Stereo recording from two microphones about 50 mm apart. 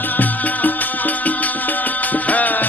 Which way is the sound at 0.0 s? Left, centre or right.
Left.